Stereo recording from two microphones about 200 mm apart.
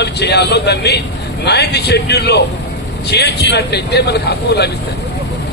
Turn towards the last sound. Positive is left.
turn(degrees=55)  # may be behind; listen again after turning